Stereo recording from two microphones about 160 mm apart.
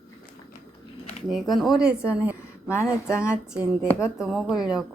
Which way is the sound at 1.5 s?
Centre (ahead or behind).